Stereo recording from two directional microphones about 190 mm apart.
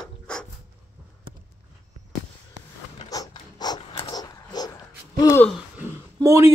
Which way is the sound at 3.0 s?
20° left (ahead or behind).